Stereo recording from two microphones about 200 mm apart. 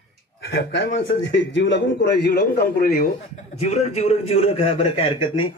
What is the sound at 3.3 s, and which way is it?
A man's voice, 35° left (ahead or behind).